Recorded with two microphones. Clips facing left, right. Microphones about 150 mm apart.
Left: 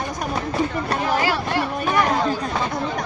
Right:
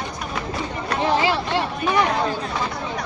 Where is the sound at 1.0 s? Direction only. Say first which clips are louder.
Right 3 dB; 20° right (ahead or behind).